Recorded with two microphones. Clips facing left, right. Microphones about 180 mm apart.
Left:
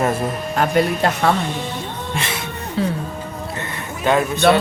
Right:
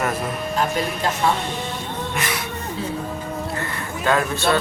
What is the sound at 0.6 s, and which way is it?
Speech, 65° left (ahead or behind).